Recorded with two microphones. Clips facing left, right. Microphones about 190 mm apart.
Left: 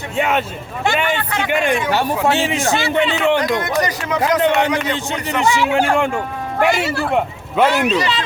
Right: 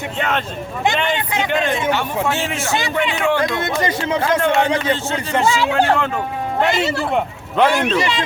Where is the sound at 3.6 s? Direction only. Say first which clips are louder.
Even; 25° right (ahead or behind).